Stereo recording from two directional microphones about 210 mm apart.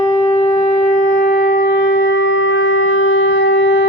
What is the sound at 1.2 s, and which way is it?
Shofar, 55° left (ahead or behind).